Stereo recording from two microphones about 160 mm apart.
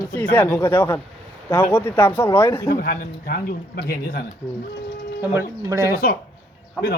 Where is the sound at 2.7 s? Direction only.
65° left (ahead or behind).